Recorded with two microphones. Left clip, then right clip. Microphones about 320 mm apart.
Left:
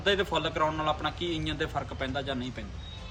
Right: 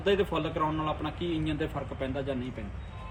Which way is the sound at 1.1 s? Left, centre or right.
Left.